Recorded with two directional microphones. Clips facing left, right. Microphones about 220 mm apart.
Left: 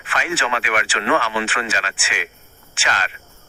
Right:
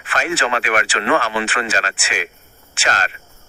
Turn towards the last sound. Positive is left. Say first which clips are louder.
# right 3 dB
turn(degrees=-40)  # may be behind; listen again after turning